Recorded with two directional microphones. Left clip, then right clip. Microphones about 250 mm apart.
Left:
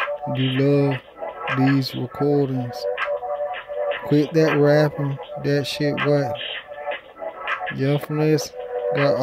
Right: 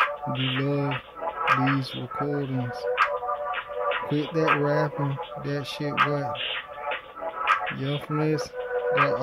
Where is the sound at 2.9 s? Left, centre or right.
Centre.